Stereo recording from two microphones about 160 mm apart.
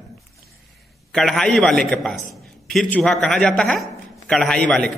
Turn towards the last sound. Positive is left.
turn(degrees=5)  # may be behind; listen again after turning